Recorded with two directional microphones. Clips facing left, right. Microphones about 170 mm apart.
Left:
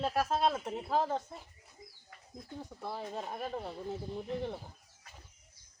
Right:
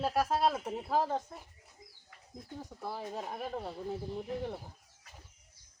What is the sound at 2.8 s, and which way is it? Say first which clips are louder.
Speech: even; 5° right (ahead or behind).